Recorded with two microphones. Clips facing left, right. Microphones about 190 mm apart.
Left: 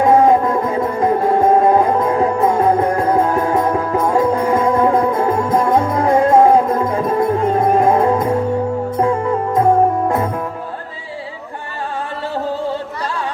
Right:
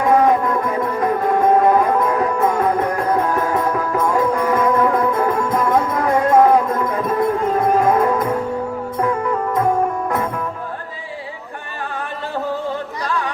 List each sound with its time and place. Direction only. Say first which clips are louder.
0.0 s music: left 3 dB; 25° left (ahead or behind)